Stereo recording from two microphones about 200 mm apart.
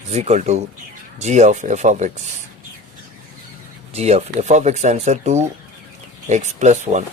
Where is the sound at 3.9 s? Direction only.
30° right (ahead or behind).